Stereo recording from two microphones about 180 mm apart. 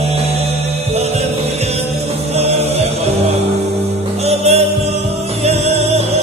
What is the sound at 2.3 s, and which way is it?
Music, 35° right (ahead or behind).